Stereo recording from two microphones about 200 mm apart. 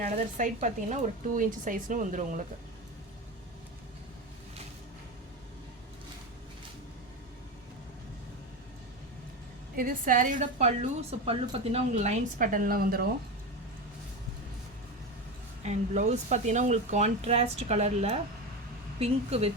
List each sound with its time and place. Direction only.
0.0 s a woman's voice: 40° right (ahead or behind)
9.7 s a woman's voice: 45° right (ahead or behind)
15.6 s a woman's voice: 35° right (ahead or behind)